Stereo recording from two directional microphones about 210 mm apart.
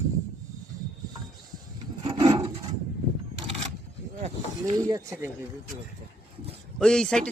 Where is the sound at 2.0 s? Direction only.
20° right (ahead or behind).